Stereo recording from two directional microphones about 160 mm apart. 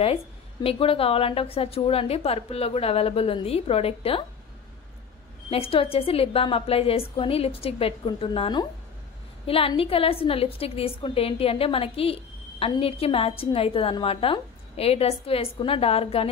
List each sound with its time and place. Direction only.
0.7 s a woman's voice: 35° left (ahead or behind)
5.5 s a woman's voice: 35° left (ahead or behind)